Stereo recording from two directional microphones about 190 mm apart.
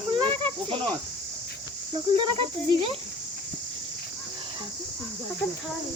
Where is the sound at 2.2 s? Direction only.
25° right (ahead or behind).